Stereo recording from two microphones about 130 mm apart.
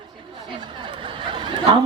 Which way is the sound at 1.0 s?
40° right (ahead or behind).